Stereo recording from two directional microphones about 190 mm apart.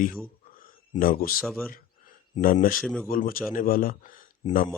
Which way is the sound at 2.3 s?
45° left (ahead or behind).